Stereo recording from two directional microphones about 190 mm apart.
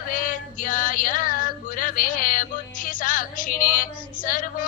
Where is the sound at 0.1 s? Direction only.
45° left (ahead or behind).